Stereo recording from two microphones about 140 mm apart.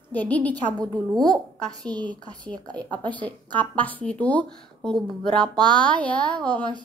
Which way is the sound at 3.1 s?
10° left (ahead or behind).